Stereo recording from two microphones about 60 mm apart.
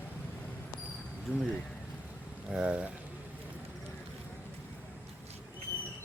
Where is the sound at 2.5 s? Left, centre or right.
Centre.